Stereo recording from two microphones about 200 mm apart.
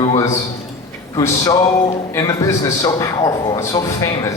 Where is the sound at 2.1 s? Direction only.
15° left (ahead or behind).